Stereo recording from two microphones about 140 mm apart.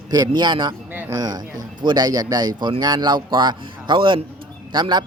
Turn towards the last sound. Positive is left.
turn(degrees=-35)  # may be behind; listen again after turning